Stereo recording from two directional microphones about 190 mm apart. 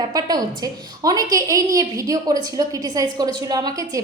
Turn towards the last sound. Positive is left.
turn(degrees=-20)  # may be behind; listen again after turning